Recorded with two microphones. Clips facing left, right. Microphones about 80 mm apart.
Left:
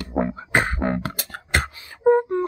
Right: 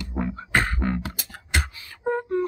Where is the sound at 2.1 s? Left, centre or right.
Left.